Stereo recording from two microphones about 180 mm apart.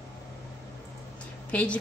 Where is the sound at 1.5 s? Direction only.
5° left (ahead or behind).